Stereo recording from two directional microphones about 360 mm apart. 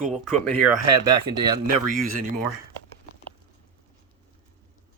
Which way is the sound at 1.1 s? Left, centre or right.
Centre.